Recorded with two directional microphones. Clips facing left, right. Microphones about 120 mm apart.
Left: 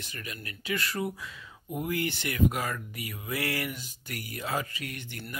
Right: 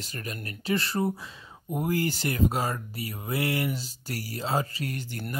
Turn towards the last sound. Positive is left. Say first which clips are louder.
# right 6 dB
turn(degrees=-35)  # may be behind; listen again after turning